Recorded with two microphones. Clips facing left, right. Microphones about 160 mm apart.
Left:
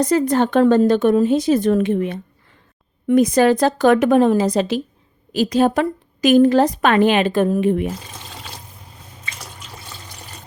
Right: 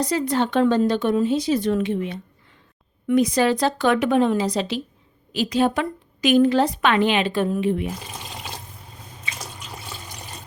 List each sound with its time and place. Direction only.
0.0 s a woman's voice: 50° left (ahead or behind)